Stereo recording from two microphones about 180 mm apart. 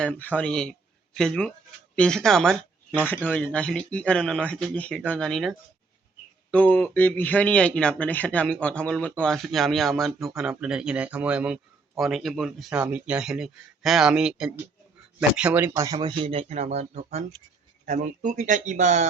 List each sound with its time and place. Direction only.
0.0 s speech: 10° left (ahead or behind); by 16.0 s 15° right (ahead or behind)
16.0 s speech: 30° right (ahead or behind)